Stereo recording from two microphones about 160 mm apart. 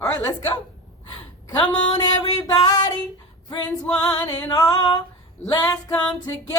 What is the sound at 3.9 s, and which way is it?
Female singing, 5° left (ahead or behind).